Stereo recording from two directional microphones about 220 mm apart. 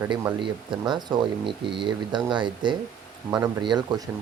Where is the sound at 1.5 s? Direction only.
20° right (ahead or behind).